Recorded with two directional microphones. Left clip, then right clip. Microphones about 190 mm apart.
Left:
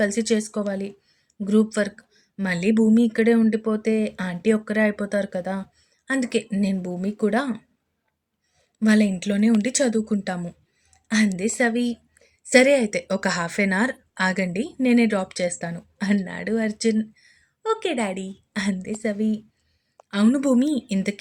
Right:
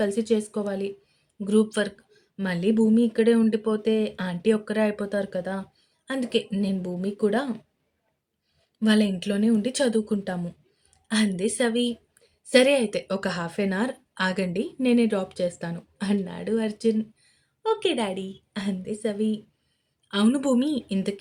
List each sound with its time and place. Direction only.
0.0 s speech: 15° left (ahead or behind)
8.8 s speech: 15° left (ahead or behind)